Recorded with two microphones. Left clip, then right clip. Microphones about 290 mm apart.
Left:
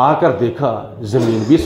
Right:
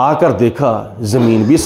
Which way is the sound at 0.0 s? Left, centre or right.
Right.